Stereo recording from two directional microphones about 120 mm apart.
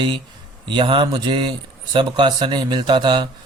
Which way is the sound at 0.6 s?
45° right (ahead or behind).